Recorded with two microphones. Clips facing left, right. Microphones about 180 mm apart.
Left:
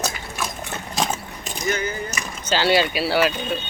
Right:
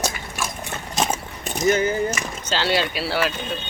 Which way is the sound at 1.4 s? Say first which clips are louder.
Right 6 dB; 45° right (ahead or behind).